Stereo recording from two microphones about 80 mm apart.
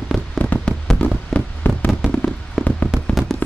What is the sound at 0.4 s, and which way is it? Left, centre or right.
Fireworks, centre.